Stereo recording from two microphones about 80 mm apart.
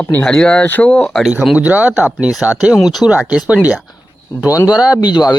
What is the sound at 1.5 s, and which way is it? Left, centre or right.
Speech, centre.